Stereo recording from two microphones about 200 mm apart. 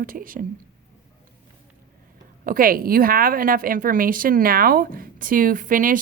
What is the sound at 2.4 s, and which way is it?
A woman's voice, 45° right (ahead or behind).